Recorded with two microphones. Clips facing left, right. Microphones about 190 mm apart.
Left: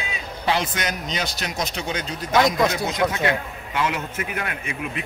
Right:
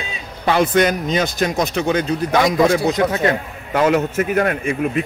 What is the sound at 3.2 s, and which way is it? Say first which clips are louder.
Speech: right 5 dB; 40° right (ahead or behind).